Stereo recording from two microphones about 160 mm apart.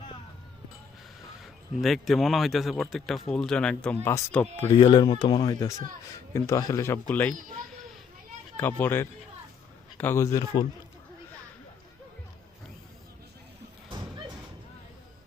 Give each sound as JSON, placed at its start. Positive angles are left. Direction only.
{"t": 1.7, "sound": "a man's voice", "side_deg": 0}
{"t": 4.8, "sound": "a man's voice", "side_deg": 30}
{"t": 8.5, "sound": "a man's voice", "side_deg": 10}